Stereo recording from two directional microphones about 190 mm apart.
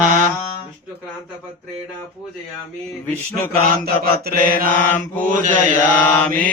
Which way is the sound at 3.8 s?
55° right (ahead or behind).